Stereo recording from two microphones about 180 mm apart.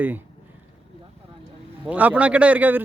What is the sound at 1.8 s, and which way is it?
Speech, 10° right (ahead or behind).